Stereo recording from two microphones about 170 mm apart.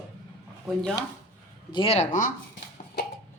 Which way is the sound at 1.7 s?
35° left (ahead or behind).